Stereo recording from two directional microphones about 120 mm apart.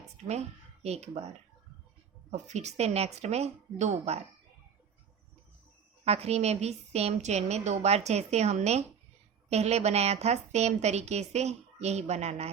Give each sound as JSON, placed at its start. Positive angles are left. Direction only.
{"t": 0.3, "sound": "a woman's voice", "side_deg": -65}
{"t": 6.1, "sound": "a woman's voice", "side_deg": -60}